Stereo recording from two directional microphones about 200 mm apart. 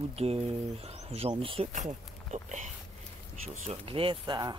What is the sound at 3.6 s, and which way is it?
Speech, 30° right (ahead or behind).